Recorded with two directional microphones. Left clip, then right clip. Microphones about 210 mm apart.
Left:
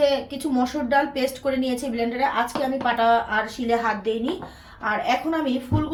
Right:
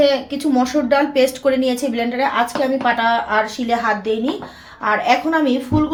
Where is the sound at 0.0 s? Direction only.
30° right (ahead or behind).